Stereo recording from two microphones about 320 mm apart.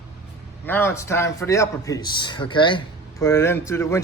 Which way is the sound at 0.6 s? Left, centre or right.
Centre.